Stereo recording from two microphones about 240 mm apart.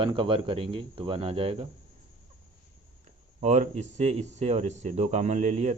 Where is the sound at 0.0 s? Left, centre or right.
Right.